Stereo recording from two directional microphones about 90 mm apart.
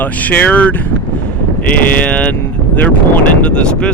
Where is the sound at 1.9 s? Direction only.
15° left (ahead or behind).